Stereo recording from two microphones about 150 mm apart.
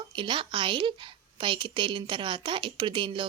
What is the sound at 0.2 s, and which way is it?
A woman's voice, 35° right (ahead or behind).